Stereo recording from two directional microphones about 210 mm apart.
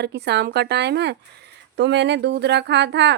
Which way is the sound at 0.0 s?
55° right (ahead or behind).